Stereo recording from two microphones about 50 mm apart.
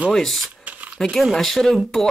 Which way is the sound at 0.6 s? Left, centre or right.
Right.